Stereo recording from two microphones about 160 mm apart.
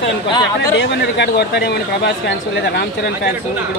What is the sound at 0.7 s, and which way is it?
Speech, 90° left.